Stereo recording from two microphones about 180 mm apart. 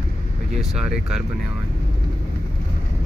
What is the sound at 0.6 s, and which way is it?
Speech, 5° right (ahead or behind).